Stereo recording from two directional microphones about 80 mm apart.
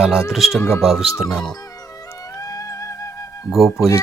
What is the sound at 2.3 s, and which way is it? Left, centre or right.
Music, left.